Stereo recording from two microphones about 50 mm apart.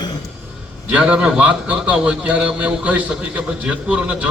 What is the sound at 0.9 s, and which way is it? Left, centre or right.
A man's voice, right.